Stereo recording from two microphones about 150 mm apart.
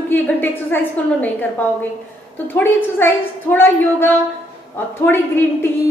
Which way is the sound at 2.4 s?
15° left (ahead or behind).